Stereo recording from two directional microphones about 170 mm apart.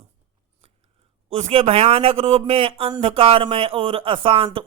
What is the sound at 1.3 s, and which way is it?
A man's voice, 40° right (ahead or behind).